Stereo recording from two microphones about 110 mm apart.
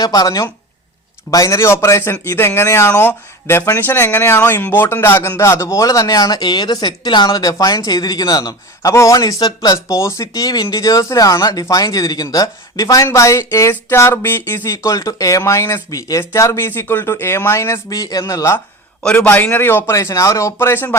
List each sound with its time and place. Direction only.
0.0 s speech: 35° left (ahead or behind)
19.0 s speech: 15° left (ahead or behind)